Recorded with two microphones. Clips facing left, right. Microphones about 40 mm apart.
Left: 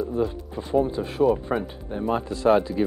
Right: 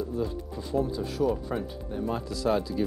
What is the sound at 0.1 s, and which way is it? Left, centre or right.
Speech, left.